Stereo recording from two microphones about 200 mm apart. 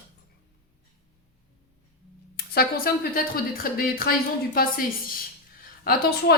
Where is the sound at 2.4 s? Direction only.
50° left (ahead or behind).